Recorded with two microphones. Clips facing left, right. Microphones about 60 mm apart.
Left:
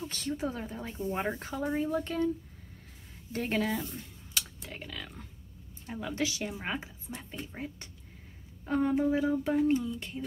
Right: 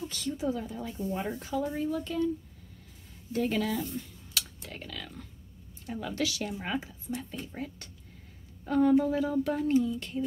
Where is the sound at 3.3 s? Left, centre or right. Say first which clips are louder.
Right 2 dB; left.